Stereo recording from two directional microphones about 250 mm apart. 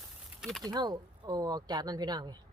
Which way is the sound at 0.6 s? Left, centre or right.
Centre.